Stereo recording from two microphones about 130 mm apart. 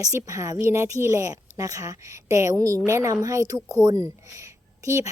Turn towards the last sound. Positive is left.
turn(degrees=-25)  # may be behind; listen again after turning